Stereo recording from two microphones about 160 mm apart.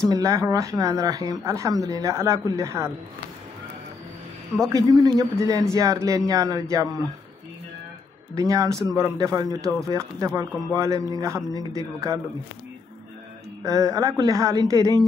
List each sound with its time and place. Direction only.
0.1 s a man's voice: 20° right (ahead or behind)
4.7 s a man's voice: 25° right (ahead or behind)
8.4 s a man's voice: 20° right (ahead or behind)
13.7 s a man's voice: 20° right (ahead or behind)